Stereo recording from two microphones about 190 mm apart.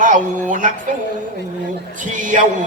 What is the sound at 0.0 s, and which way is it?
Music, 45° right (ahead or behind).